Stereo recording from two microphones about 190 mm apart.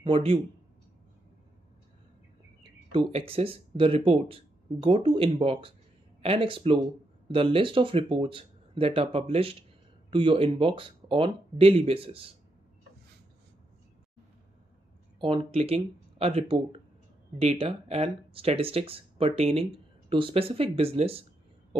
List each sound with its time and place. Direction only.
0.0 s speech: 30° right (ahead or behind)
2.9 s speech: 30° right (ahead or behind)
15.1 s speech: 30° right (ahead or behind)